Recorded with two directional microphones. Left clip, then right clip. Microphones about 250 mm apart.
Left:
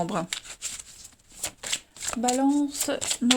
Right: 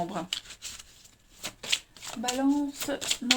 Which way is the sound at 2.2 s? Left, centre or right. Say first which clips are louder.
Left 4 dB; left.